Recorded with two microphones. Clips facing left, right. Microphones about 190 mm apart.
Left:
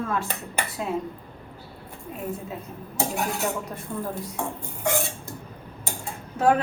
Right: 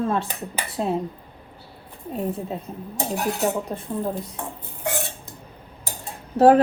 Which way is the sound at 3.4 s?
35° right (ahead or behind).